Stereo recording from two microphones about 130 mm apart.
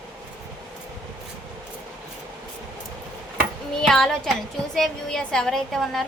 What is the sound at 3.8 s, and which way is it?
A woman's voice, 5° left (ahead or behind).